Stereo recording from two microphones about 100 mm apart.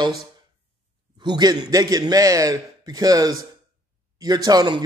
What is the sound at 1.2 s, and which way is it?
A man's voice, 45° right (ahead or behind).